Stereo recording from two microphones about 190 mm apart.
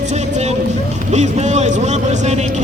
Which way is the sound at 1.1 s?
35° right (ahead or behind).